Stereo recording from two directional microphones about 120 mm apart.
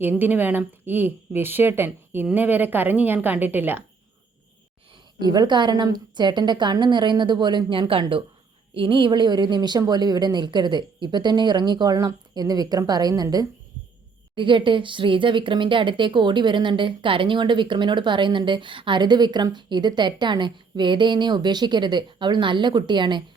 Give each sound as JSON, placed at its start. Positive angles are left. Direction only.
{"t": 0.0, "sound": "speech", "side_deg": -15}
{"t": 4.9, "sound": "speech", "side_deg": -40}
{"t": 14.3, "sound": "speech", "side_deg": -45}